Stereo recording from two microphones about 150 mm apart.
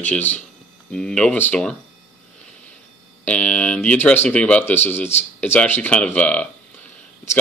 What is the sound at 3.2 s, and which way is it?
Speech, 10° left (ahead or behind).